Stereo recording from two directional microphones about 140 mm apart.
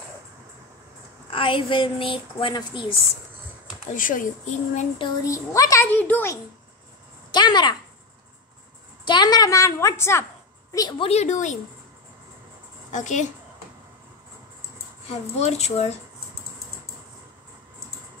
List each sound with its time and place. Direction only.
1.3 s a woman's voice: 40° left (ahead or behind)
3.9 s speech: 75° left (ahead or behind)
5.2 s a woman's voice: 20° left (ahead or behind)
7.2 s a woman's voice: 30° left (ahead or behind)
9.0 s a woman's voice: 30° left (ahead or behind)
11.0 s speech: 50° left (ahead or behind)
12.9 s speech: 60° left (ahead or behind)
15.0 s speech: 50° left (ahead or behind)